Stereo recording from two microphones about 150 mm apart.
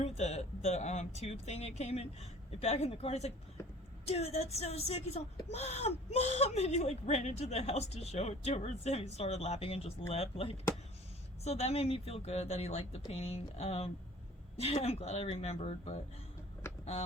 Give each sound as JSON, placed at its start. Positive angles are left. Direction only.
{"t": 0.0, "sound": "speech", "side_deg": 45}